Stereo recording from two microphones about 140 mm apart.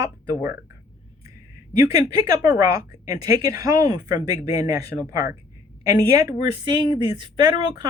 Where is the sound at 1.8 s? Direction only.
25° right (ahead or behind).